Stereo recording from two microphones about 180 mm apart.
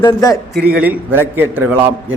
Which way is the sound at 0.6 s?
5° right (ahead or behind).